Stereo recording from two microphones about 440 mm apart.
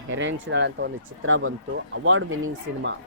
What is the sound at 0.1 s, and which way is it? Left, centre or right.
Speech, right.